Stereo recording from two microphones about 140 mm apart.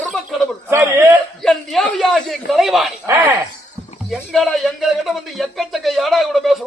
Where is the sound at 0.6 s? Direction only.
20° right (ahead or behind).